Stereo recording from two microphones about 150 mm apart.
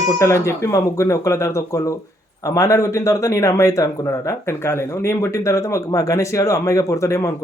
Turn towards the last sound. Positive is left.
turn(degrees=20)  # may be behind; listen again after turning